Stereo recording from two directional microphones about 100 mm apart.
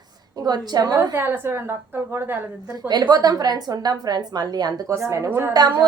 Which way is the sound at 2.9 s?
45° right (ahead or behind).